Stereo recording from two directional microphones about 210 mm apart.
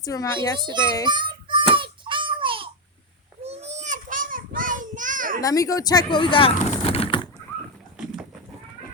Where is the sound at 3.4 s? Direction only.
30° right (ahead or behind).